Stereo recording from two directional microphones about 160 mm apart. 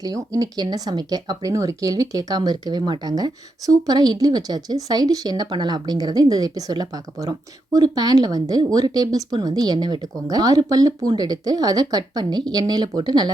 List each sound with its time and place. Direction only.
0.0 s speech: 20° right (ahead or behind)